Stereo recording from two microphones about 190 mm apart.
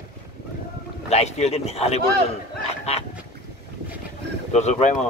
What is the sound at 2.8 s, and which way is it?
Fowl, 35° left (ahead or behind).